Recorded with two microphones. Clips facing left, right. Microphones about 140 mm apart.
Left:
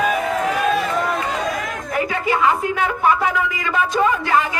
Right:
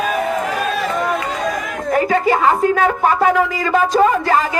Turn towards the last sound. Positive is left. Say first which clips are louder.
# right 4 dB
turn(degrees=-35)  # may be behind; listen again after turning